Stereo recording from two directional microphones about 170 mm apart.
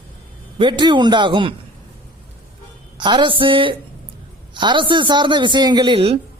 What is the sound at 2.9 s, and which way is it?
A man's voice, 30° right (ahead or behind).